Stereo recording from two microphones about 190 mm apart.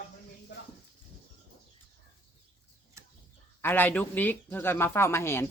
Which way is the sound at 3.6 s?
10° left (ahead or behind).